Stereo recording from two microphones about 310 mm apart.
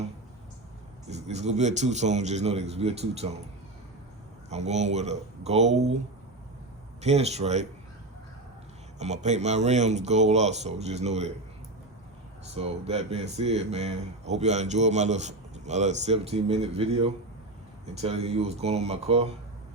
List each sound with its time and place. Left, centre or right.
1.0 s speech: right
4.4 s speech: right
7.0 s speech: right
9.0 s speech: right
12.5 s speech: centre